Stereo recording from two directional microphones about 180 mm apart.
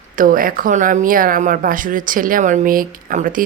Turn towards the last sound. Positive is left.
turn(degrees=-50)  # may be behind; listen again after turning